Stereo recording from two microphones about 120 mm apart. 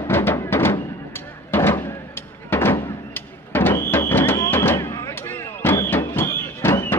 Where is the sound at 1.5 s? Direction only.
20° left (ahead or behind).